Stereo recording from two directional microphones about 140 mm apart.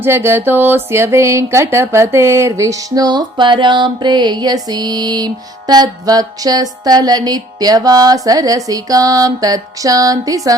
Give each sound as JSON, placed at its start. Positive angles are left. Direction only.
{"t": 0.0, "sound": "speech", "side_deg": -15}